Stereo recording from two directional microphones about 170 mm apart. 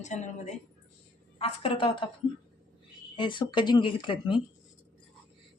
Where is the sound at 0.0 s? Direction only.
45° left (ahead or behind).